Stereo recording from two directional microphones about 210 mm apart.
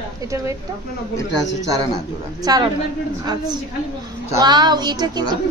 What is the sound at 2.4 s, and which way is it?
Speech, 20° right (ahead or behind).